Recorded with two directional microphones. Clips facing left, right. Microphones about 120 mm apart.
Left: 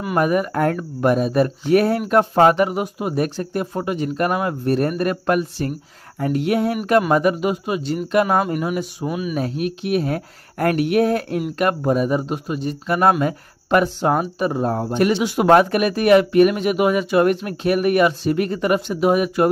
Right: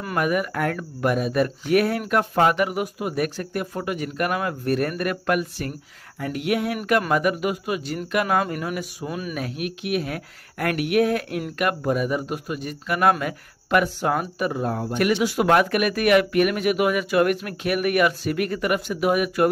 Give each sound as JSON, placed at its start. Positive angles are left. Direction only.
{"t": 0.1, "sound": "speech", "side_deg": 30}
{"t": 8.4, "sound": "speech", "side_deg": 15}
{"t": 9.3, "sound": "speech", "side_deg": 30}